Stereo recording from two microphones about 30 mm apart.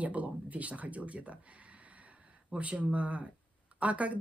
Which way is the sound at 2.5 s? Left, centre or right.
Right.